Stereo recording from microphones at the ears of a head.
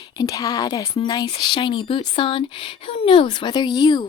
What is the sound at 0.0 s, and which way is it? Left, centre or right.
Speech, left.